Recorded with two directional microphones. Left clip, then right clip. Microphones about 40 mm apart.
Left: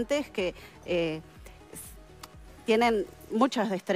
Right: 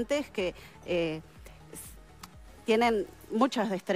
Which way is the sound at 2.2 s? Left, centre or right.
Right.